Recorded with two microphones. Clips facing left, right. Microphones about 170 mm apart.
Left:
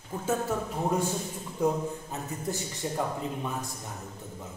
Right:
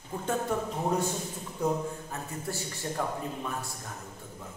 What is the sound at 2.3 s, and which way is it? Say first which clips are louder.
Speech: left 3 dB; 20° left (ahead or behind).